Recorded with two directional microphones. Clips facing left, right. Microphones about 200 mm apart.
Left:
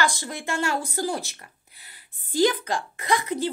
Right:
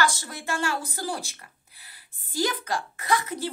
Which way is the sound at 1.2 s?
35° right (ahead or behind).